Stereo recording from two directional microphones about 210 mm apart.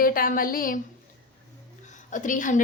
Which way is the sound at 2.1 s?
35° left (ahead or behind).